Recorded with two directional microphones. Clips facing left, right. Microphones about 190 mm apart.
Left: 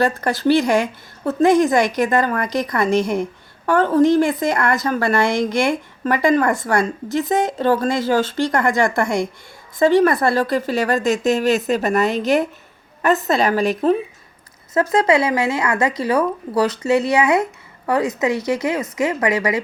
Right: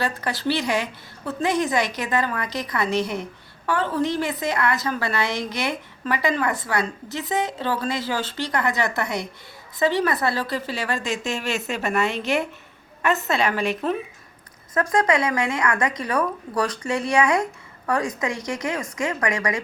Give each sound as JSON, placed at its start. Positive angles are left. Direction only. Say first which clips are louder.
{"t": 0.0, "sound": "a woman's voice", "louder": "left 7 dB", "side_deg": 45}
{"t": 14.9, "sound": "a woman's voice", "louder": "left 4 dB", "side_deg": 25}